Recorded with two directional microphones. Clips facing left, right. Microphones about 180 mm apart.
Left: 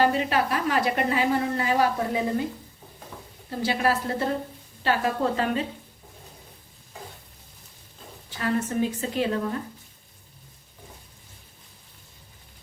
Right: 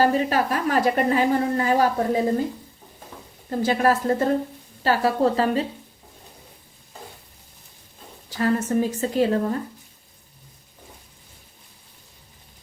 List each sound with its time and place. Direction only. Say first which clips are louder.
0.0 s a woman's voice: right 3 dB; 40° right (ahead or behind)
3.6 s a woman's voice: right 4 dB; 45° right (ahead or behind)
8.3 s a woman's voice: right 5 dB; 40° right (ahead or behind)